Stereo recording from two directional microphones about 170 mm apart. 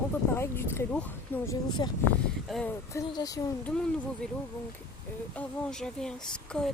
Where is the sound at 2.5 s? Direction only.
Centre (ahead or behind).